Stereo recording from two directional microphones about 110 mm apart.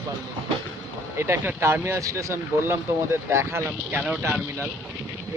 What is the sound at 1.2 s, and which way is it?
Speech, 20° right (ahead or behind).